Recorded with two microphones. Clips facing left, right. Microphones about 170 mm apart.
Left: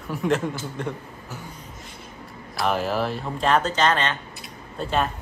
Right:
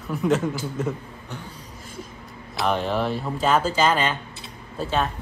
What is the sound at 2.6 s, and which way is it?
A child's voice, centre (ahead or behind).